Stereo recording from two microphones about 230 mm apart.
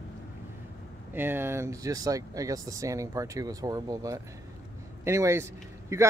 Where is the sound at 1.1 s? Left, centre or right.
Centre.